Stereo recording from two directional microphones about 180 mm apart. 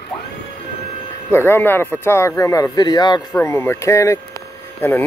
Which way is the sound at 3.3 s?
15° left (ahead or behind).